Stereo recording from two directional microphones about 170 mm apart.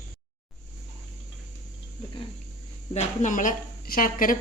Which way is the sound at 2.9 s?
45° left (ahead or behind).